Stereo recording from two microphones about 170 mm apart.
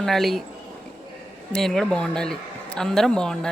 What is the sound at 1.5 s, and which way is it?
Speech, centre (ahead or behind).